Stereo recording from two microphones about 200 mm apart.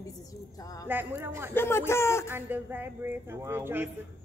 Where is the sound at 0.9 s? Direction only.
10° right (ahead or behind).